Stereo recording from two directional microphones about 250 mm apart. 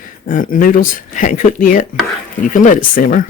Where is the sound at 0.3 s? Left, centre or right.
Left.